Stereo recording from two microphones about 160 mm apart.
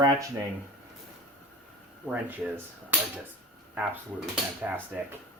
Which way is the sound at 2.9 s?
10° right (ahead or behind).